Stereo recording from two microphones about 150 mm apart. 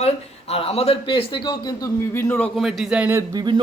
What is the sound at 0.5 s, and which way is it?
A man's voice, 40° left (ahead or behind).